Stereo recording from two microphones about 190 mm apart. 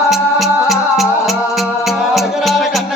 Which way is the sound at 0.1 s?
Centre (ahead or behind).